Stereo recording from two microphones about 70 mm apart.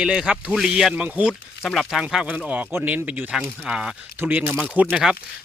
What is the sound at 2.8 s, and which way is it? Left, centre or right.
Speech, right.